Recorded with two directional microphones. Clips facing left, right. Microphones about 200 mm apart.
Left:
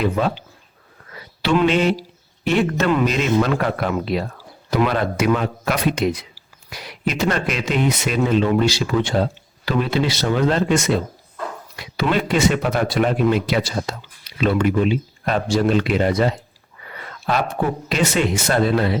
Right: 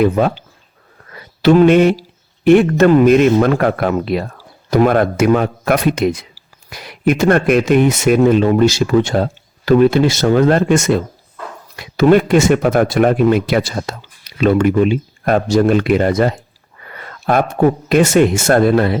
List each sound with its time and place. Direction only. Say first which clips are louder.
1.1 s speech: right 9 dB; 45° right (ahead or behind)